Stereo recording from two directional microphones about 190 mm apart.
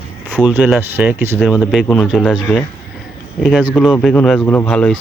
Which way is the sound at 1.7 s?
5° left (ahead or behind).